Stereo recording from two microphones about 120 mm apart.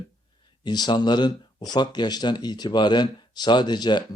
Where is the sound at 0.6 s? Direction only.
35° left (ahead or behind).